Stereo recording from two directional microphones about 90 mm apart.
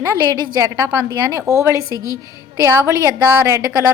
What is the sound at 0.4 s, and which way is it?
Speech, 45° right (ahead or behind).